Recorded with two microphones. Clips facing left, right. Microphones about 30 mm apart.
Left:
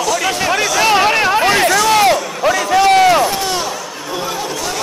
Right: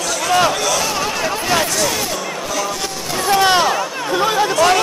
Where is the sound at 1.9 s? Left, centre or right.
Left.